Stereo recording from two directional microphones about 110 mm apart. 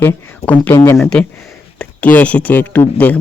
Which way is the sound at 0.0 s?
15° left (ahead or behind).